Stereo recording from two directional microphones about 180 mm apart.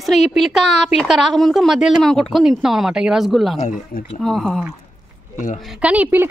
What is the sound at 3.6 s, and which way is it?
Speech, 40° left (ahead or behind).